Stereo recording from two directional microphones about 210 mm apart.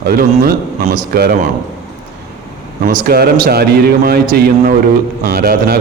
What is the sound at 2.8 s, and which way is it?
A man's voice, 40° right (ahead or behind).